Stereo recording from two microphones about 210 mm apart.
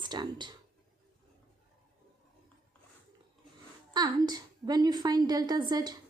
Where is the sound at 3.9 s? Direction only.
20° right (ahead or behind).